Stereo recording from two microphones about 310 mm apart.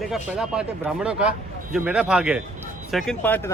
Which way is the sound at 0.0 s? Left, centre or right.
Centre.